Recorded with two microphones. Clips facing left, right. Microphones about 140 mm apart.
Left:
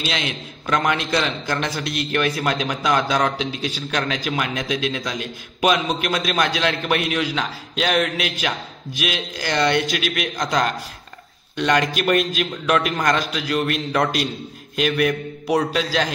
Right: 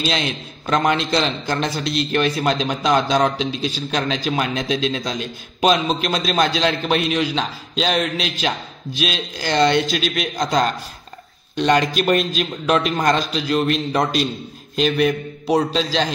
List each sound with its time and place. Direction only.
0.0 s a man's voice: 35° right (ahead or behind)